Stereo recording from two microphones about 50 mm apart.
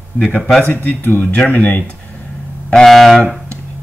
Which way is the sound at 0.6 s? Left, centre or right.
Left.